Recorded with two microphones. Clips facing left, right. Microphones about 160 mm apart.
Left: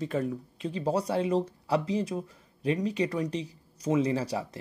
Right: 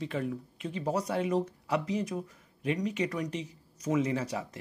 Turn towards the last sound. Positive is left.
turn(degrees=30)  # may be behind; listen again after turning